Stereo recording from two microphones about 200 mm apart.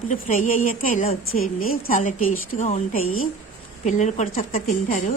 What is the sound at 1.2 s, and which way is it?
Speech, 90° left.